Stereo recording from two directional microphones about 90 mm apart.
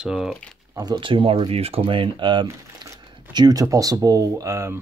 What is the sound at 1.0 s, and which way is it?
Speech, 70° right (ahead or behind).